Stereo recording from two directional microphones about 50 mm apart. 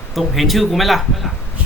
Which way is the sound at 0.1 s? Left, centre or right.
Centre.